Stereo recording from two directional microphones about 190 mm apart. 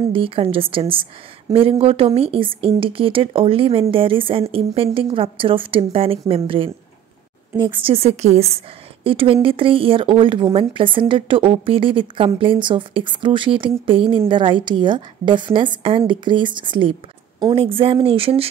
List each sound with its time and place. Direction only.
0.1 s a woman's voice: 30° right (ahead or behind)